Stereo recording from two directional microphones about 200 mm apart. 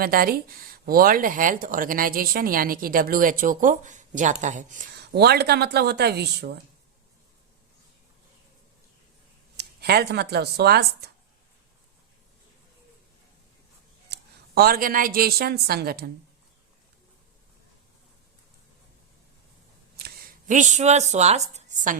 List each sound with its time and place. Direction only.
0.0 s speech: 45° right (ahead or behind)
4.9 s speech: 55° right (ahead or behind)
9.6 s speech: 55° right (ahead or behind)
14.1 s a woman's voice: 50° right (ahead or behind)
20.0 s a woman's voice: 45° right (ahead or behind)